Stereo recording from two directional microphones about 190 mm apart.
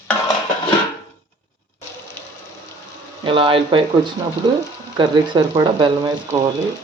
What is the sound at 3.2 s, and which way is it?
Speech, 25° right (ahead or behind).